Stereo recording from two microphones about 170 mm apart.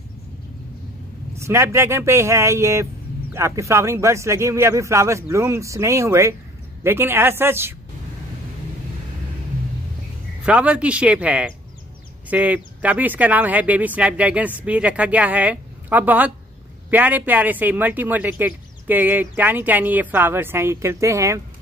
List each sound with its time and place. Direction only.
1.3 s speech: 15° right (ahead or behind)
10.4 s speech: 5° right (ahead or behind)